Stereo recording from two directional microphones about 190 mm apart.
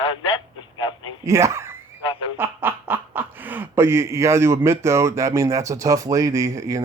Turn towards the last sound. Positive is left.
turn(degrees=-15)  # may be behind; listen again after turning